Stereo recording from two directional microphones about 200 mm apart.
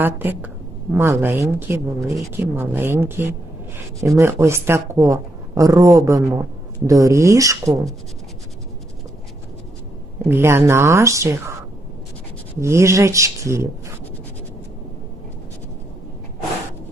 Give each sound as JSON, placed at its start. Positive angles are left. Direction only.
{"t": 0.0, "sound": "speech", "side_deg": -10}
{"t": 10.2, "sound": "speech", "side_deg": -10}
{"t": 12.5, "sound": "speech", "side_deg": -15}